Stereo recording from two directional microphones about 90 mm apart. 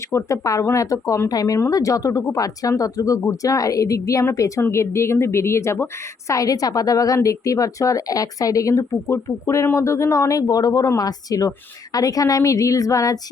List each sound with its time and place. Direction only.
0.1 s speech: 35° left (ahead or behind)
6.3 s speech: 40° left (ahead or behind)